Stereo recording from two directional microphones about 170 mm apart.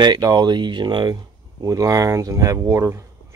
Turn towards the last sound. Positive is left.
turn(degrees=-15)  # may be behind; listen again after turning